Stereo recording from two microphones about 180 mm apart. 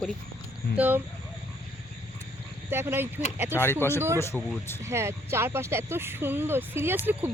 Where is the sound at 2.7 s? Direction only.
15° right (ahead or behind).